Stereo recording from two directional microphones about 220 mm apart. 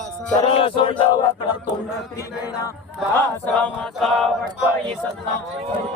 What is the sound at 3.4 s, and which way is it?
Chant, 5° left (ahead or behind).